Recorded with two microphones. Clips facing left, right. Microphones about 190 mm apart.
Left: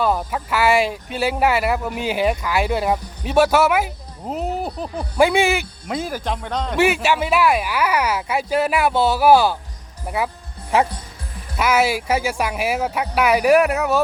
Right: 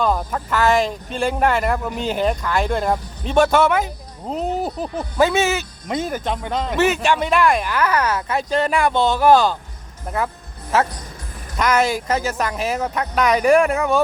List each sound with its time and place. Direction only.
0.0 s speech: 5° left (ahead or behind)
5.1 s speech: 15° left (ahead or behind)
6.0 s speech: centre (ahead or behind)
6.7 s speech: 10° left (ahead or behind)
10.7 s speech: 15° left (ahead or behind)